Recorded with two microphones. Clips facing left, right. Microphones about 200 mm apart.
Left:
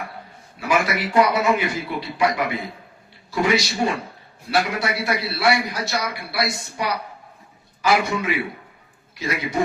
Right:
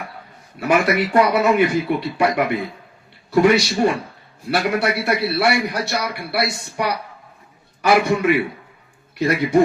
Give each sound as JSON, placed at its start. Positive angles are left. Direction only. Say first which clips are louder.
{"t": 0.6, "sound": "a man's voice", "louder": "right 4 dB", "side_deg": -60}